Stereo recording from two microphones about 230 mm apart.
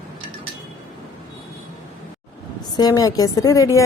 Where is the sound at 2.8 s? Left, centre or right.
Centre.